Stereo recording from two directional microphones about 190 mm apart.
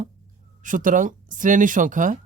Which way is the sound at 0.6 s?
45° right (ahead or behind).